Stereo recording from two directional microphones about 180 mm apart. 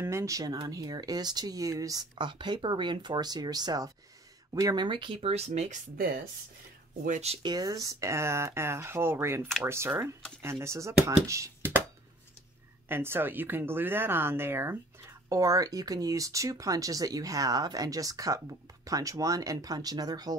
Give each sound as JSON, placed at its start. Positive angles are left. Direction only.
{"t": 0.0, "sound": "speech", "side_deg": -15}
{"t": 7.1, "sound": "speech", "side_deg": -40}
{"t": 7.4, "sound": "speech", "side_deg": -20}
{"t": 12.8, "sound": "speech", "side_deg": -10}